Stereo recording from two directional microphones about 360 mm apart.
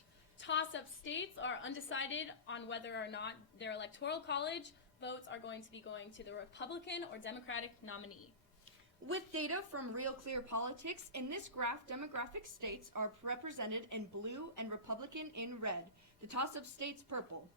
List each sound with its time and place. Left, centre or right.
0.3 s a woman's voice: left
9.0 s speech: right